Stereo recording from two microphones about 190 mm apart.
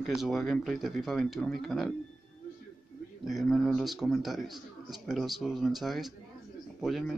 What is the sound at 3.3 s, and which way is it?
A man's voice, centre (ahead or behind).